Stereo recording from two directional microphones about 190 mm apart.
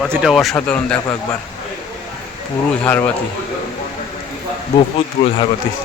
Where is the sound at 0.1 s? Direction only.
Centre (ahead or behind).